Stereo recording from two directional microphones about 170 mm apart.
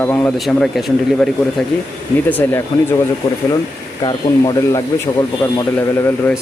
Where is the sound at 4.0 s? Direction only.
25° left (ahead or behind).